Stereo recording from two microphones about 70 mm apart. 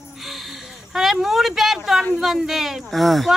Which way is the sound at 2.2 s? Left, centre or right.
Centre.